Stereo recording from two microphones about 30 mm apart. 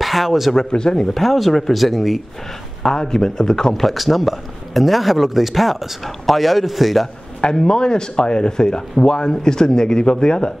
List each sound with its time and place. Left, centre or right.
0.0 s speech: centre
0.7 s speech: left
1.1 s speech: centre
2.8 s speech: left
3.8 s speech: centre
7.4 s speech: left